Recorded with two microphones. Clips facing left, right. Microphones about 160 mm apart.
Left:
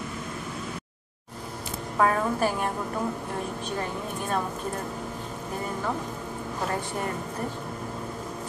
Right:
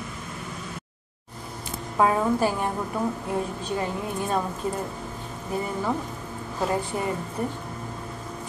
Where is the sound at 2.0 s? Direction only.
15° right (ahead or behind).